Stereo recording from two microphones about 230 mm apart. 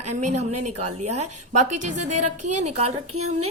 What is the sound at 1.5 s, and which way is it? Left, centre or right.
Speech, right.